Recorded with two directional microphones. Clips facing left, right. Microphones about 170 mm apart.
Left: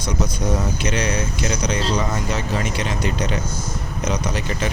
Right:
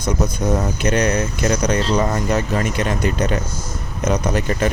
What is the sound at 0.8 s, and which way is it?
Speech, 50° right (ahead or behind).